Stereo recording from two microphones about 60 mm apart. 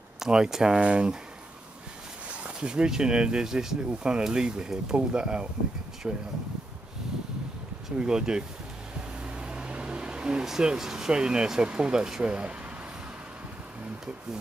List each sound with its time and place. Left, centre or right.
0.2 s speech: centre
2.4 s speech: centre
8.0 s speech: centre
9.4 s vehicle: centre
10.4 s speech: centre